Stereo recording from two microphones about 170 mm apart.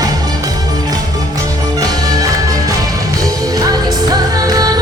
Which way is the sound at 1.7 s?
20° right (ahead or behind).